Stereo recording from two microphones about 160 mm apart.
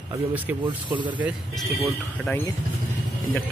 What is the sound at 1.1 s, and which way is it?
Speech, 10° right (ahead or behind).